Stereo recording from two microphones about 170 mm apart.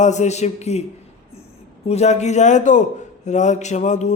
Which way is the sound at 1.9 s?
40° left (ahead or behind).